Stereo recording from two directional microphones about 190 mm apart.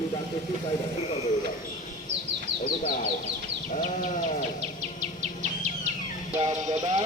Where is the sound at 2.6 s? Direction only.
40° left (ahead or behind).